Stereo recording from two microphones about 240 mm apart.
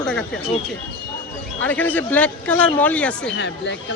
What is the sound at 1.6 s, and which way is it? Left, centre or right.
Speech, centre.